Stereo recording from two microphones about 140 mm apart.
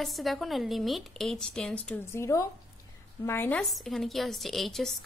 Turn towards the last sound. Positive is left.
turn(degrees=0)  # may be behind; listen again after turning